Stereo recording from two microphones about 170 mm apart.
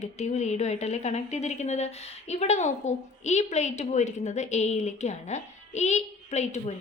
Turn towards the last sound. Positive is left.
turn(degrees=40)  # may be behind; listen again after turning